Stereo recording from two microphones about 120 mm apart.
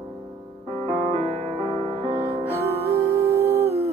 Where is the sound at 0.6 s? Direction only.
55° right (ahead or behind).